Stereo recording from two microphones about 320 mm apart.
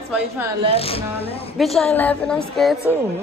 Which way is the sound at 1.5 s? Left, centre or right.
Centre.